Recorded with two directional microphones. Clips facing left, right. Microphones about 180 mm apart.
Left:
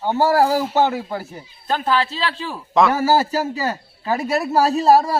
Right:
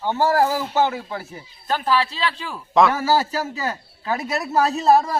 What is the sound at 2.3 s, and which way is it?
A man's voice, 30° left (ahead or behind).